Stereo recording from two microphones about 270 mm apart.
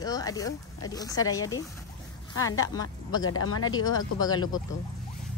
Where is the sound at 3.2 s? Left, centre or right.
Left.